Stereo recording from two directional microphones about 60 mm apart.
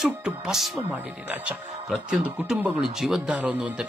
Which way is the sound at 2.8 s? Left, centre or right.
Centre.